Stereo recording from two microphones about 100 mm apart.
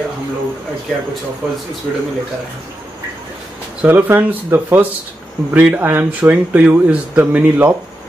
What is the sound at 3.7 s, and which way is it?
Speech, 20° right (ahead or behind).